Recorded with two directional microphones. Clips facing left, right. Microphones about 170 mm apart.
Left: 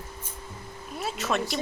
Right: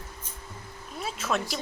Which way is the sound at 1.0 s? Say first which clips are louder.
Left 2 dB; centre (ahead or behind).